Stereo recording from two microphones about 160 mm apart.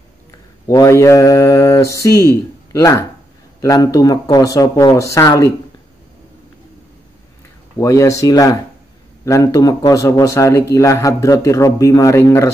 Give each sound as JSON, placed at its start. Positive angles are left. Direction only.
{"t": 0.7, "sound": "speech", "side_deg": 20}
{"t": 7.7, "sound": "speech", "side_deg": 20}